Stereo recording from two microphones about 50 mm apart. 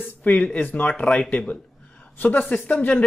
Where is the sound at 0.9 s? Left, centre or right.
Left.